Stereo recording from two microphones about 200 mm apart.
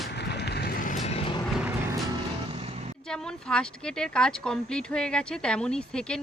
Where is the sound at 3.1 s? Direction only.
5° left (ahead or behind).